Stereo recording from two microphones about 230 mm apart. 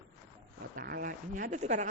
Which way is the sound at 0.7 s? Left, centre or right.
Right.